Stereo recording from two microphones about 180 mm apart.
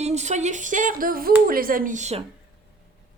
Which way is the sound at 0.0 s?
40° right (ahead or behind).